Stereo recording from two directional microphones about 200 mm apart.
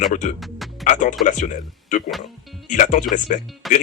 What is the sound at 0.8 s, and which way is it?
Speech, 40° left (ahead or behind).